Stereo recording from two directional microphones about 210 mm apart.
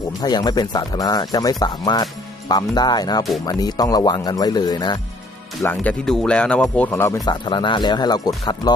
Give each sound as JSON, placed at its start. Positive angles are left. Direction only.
{"t": 0.2, "sound": "speech", "side_deg": 20}
{"t": 5.6, "sound": "speech", "side_deg": 5}